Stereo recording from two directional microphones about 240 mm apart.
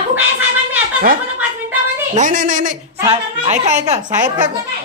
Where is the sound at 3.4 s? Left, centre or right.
Right.